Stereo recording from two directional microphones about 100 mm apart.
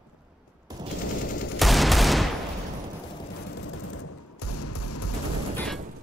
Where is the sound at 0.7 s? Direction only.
40° right (ahead or behind).